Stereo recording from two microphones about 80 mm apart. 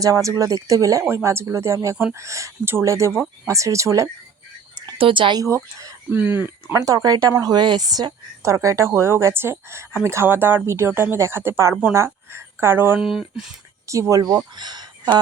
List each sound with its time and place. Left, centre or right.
0.0 s speech: right
1.0 s speech: right
5.0 s speech: right
5.4 s speech: right
6.1 s speech: right
6.7 s speech: right
8.4 s speech: right
13.0 s speech: centre
13.8 s speech: right
14.5 s speech: right